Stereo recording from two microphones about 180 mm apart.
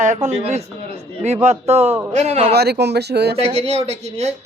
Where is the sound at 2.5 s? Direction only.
65° right (ahead or behind).